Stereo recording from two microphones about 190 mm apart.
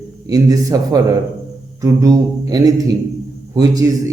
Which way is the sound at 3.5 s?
20° right (ahead or behind).